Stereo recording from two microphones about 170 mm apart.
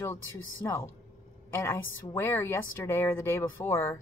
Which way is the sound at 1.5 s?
15° left (ahead or behind).